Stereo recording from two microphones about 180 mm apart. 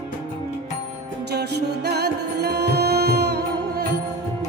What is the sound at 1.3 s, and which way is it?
Music, 65° right (ahead or behind).